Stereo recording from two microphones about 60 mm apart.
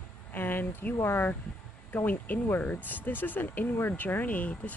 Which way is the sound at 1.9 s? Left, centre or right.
Left.